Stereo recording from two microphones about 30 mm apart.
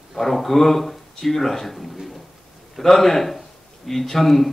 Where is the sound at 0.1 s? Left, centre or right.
Centre.